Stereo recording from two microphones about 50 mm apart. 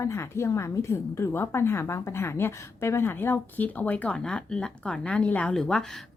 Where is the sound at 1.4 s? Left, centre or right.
Left.